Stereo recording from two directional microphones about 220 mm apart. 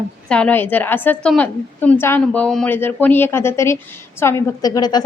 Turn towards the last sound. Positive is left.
turn(degrees=20)  # may be behind; listen again after turning